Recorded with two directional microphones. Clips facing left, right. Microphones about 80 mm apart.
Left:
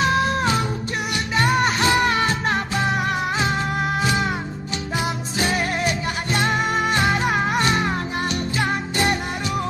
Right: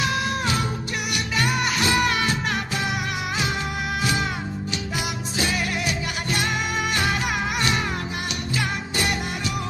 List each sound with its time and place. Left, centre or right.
0.0 s music: left
4.0 s music: left
5.5 s music: left